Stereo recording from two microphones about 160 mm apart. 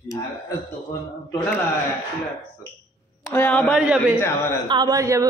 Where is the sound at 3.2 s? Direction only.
15° left (ahead or behind).